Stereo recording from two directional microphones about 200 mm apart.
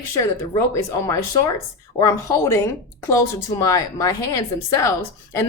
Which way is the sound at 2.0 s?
15° left (ahead or behind).